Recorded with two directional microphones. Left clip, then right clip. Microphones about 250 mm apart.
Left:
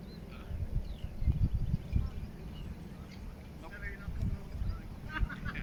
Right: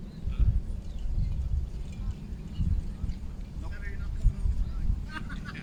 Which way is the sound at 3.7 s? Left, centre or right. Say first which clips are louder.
Left 1 dB; right.